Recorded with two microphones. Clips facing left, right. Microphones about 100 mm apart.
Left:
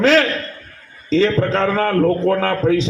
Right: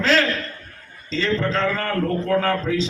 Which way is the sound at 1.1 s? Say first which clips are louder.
Left 6 dB; 50° left (ahead or behind).